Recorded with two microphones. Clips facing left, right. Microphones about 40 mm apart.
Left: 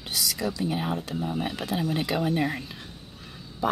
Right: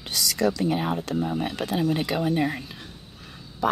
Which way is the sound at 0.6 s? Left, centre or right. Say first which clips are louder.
Right 3 dB; centre.